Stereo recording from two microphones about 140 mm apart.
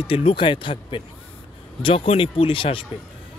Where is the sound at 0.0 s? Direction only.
40° left (ahead or behind).